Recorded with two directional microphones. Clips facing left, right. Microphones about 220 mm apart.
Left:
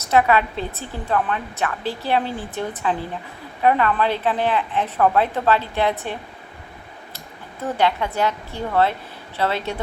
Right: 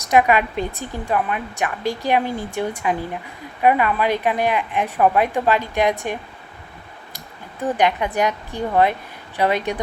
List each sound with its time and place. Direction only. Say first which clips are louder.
0.0 s a woman's voice: right 1 dB; 15° right (ahead or behind)
7.6 s a woman's voice: right 2 dB; 15° right (ahead or behind)